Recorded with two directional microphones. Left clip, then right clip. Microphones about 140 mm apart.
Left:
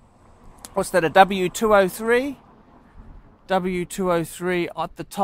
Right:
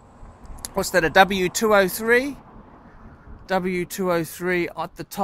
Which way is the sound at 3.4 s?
60° left (ahead or behind).